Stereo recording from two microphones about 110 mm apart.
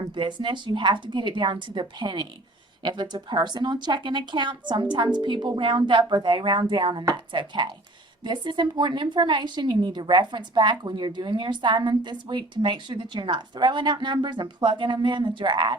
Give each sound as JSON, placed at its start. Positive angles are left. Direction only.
{"t": 0.1, "sound": "a woman's voice", "side_deg": -45}